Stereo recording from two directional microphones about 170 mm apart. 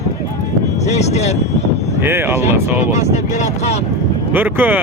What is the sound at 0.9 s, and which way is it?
Speech, 40° left (ahead or behind).